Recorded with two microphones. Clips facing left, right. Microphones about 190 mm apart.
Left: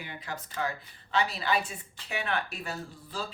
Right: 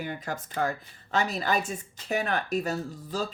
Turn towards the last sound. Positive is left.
turn(degrees=-40)  # may be behind; listen again after turning